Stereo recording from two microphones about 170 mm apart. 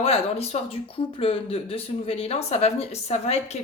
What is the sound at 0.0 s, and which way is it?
Speech, 35° left (ahead or behind).